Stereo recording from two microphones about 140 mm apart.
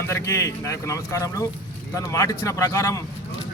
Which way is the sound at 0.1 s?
20° left (ahead or behind).